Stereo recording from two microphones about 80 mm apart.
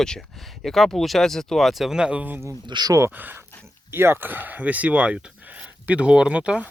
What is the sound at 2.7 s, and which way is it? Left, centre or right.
Speech, right.